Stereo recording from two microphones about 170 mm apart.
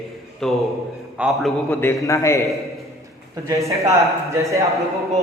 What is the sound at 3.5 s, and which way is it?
Speech, 20° right (ahead or behind).